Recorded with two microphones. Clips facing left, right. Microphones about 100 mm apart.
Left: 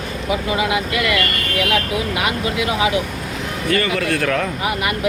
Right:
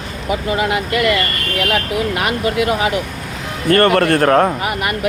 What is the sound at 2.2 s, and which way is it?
Speech, 45° right (ahead or behind).